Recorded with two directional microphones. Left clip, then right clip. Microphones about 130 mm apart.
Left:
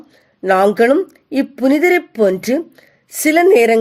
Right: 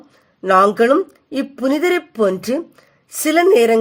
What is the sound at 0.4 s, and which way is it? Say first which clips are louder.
A woman's voice: left 1 dB; 35° left (ahead or behind).